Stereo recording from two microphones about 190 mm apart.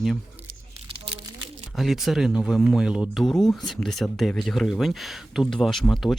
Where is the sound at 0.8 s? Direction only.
30° right (ahead or behind).